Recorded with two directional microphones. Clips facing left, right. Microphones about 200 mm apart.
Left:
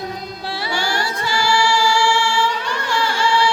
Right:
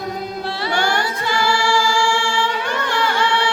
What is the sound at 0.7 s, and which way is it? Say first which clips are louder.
Choir: right 3 dB; 55° right (ahead or behind).